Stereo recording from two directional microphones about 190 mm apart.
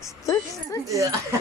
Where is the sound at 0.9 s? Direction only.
15° right (ahead or behind).